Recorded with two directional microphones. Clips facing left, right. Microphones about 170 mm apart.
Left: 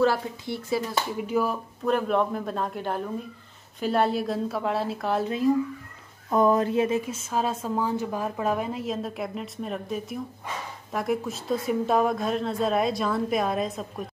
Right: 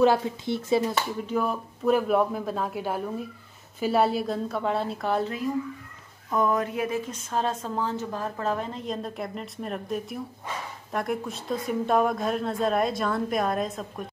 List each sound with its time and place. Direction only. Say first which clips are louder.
0.0 s speech: right 2 dB; 20° right (ahead or behind)
1.1 s a woman's voice: left 1 dB; 10° left (ahead or behind)
6.3 s a sound: left 4 dB; 30° left (ahead or behind)
7.1 s a woman's voice: left 1 dB; 5° left (ahead or behind)